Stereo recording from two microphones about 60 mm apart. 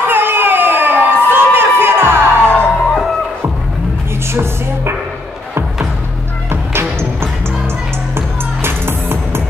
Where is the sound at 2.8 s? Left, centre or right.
Centre.